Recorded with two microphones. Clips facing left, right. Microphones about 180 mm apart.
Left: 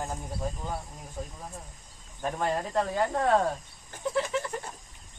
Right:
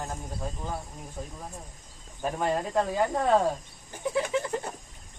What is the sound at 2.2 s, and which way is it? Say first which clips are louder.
Speech: right 1 dB; 5° right (ahead or behind).